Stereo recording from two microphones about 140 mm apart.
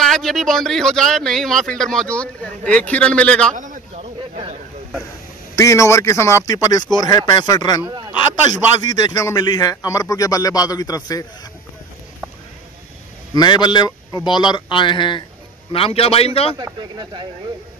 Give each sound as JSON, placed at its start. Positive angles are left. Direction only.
{"t": 0.0, "sound": "speech", "side_deg": 0}
{"t": 3.5, "sound": "a sound", "side_deg": -65}
{"t": 3.9, "sound": "a sound", "side_deg": -45}
{"t": 5.6, "sound": "a man's voice", "side_deg": 20}
{"t": 13.3, "sound": "a man's voice", "side_deg": 30}
{"t": 16.5, "sound": "speech", "side_deg": -30}